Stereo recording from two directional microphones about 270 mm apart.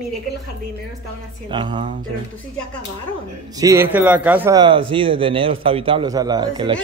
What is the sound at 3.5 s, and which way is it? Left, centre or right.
A man's voice, centre.